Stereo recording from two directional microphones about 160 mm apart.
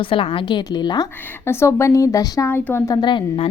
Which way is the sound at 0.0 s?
35° left (ahead or behind).